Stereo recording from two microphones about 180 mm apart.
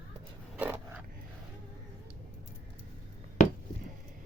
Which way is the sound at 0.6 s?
10° right (ahead or behind).